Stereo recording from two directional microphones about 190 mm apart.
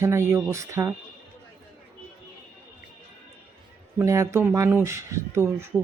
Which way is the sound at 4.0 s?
15° right (ahead or behind).